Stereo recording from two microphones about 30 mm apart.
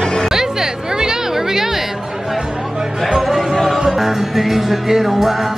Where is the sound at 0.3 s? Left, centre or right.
Centre.